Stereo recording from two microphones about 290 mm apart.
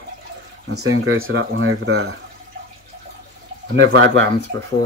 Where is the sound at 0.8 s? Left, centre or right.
Right.